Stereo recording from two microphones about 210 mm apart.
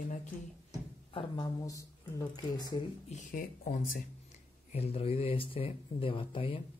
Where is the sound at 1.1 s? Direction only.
20° left (ahead or behind).